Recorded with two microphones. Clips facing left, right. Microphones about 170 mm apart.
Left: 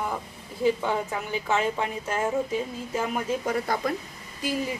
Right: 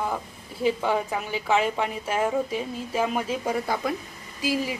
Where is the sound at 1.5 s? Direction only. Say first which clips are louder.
Right 3 dB; 15° right (ahead or behind).